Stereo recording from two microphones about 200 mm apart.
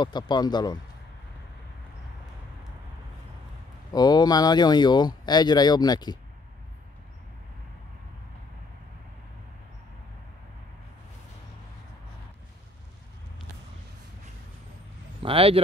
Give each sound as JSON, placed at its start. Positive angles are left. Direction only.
{"t": 0.0, "sound": "speech", "side_deg": 20}
{"t": 3.9, "sound": "speech", "side_deg": 20}
{"t": 15.2, "sound": "speech", "side_deg": -30}